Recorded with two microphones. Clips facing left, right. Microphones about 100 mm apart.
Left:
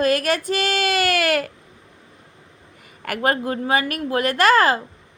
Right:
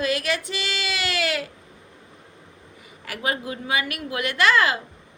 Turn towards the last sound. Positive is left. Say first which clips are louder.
# left 4 dB
turn(degrees=40)  # may be behind; listen again after turning